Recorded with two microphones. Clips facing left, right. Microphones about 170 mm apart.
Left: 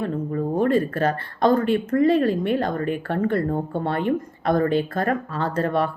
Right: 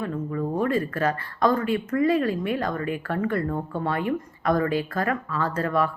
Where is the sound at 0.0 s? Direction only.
35° left (ahead or behind).